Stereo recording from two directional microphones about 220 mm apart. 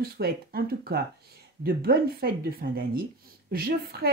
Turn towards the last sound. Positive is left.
turn(degrees=-45)  # may be behind; listen again after turning